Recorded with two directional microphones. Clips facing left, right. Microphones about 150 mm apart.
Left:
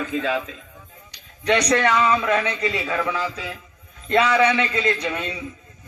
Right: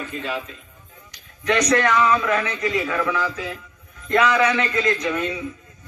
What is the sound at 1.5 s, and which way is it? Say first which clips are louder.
A man's voice: even; 30° left (ahead or behind).